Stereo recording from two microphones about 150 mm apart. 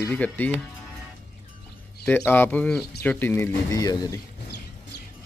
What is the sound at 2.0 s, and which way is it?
Speech, 15° left (ahead or behind).